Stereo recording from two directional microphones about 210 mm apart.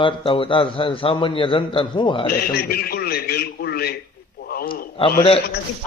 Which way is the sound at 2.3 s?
45° left (ahead or behind).